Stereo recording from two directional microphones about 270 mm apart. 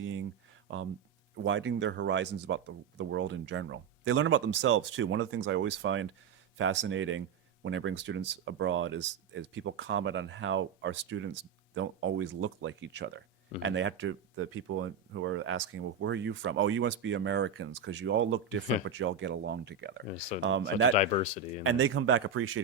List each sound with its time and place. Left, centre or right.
0.0 s speech: right
1.5 s speech: right
20.9 s speech: left
21.6 s speech: right